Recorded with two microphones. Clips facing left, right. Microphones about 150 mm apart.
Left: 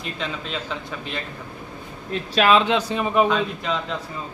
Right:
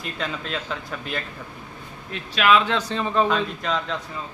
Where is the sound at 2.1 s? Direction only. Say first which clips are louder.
Left 2 dB; 35° left (ahead or behind).